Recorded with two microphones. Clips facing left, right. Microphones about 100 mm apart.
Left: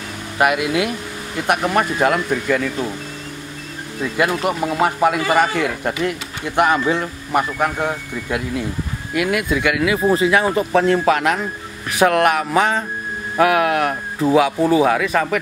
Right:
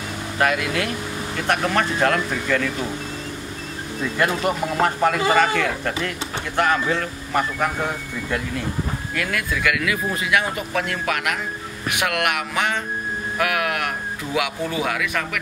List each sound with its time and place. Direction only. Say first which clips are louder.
0.4 s speech: left 4 dB; 15° left (ahead or behind)
4.0 s speech: left 3 dB; 5° left (ahead or behind)
9.1 s speech: left 8 dB; 20° left (ahead or behind); by 15.4 s 35° left (ahead or behind)